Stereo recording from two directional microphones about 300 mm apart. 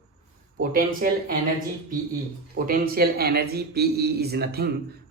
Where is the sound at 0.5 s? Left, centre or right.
Right.